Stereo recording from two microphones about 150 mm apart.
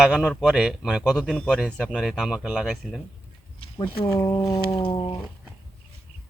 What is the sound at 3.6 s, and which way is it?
Speech, 35° left (ahead or behind).